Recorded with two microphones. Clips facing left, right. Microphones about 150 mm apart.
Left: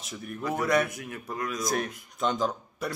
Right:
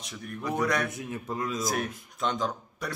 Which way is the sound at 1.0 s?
25° right (ahead or behind).